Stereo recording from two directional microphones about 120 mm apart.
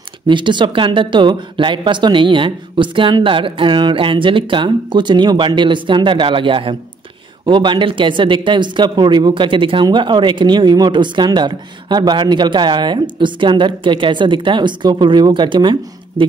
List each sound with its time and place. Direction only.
0.3 s speech: 40° right (ahead or behind)